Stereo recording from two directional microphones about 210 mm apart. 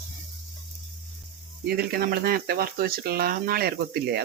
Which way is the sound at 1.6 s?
45° right (ahead or behind).